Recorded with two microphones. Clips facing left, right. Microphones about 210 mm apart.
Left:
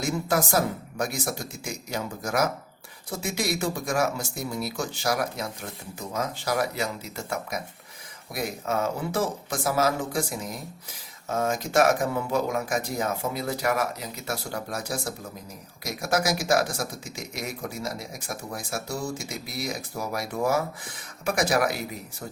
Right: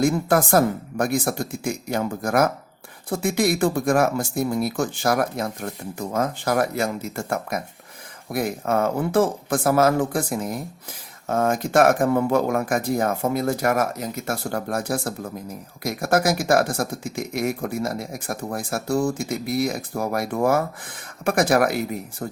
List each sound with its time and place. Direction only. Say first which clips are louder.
0.0 s speech: right 7 dB; 55° right (ahead or behind)